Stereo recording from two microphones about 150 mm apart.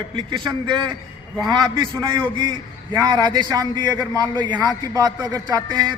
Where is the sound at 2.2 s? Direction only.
30° right (ahead or behind).